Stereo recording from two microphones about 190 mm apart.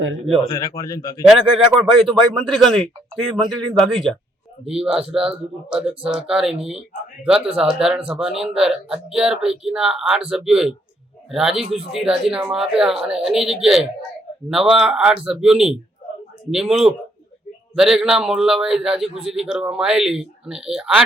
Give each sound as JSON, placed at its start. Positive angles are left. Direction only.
{"t": 0.4, "sound": "speech", "side_deg": 15}
{"t": 1.3, "sound": "speech", "side_deg": 0}